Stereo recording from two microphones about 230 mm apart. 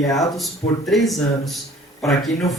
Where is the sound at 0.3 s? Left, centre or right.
Centre.